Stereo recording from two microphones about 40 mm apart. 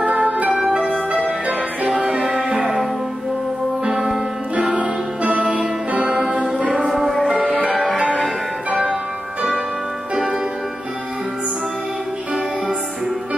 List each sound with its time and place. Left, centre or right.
0.0 s music: right
0.5 s music: centre
1.1 s music: right
1.9 s music: right
4.6 s music: right
7.7 s music: centre